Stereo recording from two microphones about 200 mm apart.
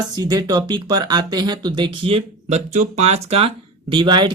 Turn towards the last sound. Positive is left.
turn(degrees=-25)  # may be behind; listen again after turning